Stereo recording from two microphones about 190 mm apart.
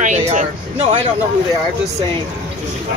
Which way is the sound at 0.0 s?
40° right (ahead or behind).